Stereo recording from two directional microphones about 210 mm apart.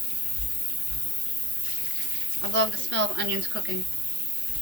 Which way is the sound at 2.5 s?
60° right (ahead or behind).